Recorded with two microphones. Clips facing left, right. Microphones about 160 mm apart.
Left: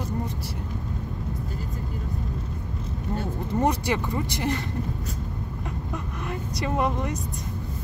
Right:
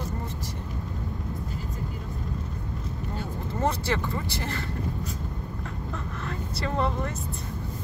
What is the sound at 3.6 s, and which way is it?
Speech, 15° left (ahead or behind).